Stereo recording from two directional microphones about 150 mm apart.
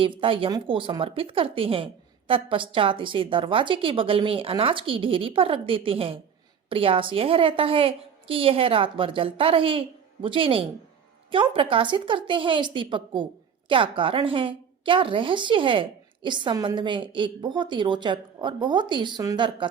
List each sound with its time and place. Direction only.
0.0 s a woman's voice: 35° right (ahead or behind)